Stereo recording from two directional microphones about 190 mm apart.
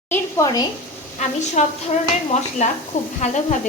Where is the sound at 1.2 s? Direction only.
35° left (ahead or behind).